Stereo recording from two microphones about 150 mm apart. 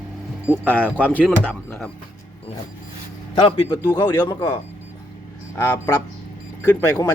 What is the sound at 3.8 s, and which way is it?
Speech, 20° left (ahead or behind).